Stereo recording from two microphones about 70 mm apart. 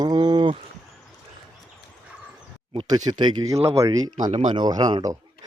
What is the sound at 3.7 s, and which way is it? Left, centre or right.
Speech, right.